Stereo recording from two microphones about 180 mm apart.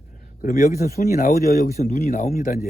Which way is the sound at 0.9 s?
55° left (ahead or behind).